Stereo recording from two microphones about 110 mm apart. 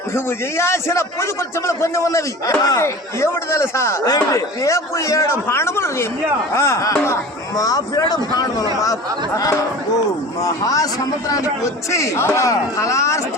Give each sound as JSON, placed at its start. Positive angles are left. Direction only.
{"t": 0.1, "sound": "a man's voice", "side_deg": 25}